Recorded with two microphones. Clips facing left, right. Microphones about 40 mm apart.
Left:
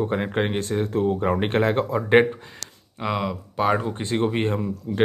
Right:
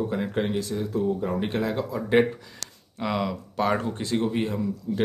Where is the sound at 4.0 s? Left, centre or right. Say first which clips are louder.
Left 2 dB; left.